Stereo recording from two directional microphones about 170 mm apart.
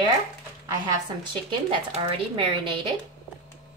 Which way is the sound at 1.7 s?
30° right (ahead or behind).